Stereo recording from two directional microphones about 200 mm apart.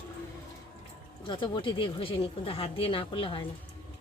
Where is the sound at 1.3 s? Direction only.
20° left (ahead or behind).